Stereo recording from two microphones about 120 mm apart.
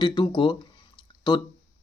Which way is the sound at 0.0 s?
35° left (ahead or behind).